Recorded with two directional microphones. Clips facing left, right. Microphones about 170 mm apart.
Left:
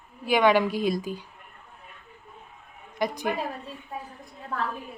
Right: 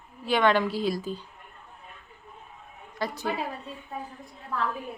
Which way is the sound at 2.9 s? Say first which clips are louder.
Left 3 dB; 15° left (ahead or behind).